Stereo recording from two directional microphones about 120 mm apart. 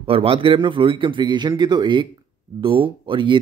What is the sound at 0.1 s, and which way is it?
Speech, 50° right (ahead or behind).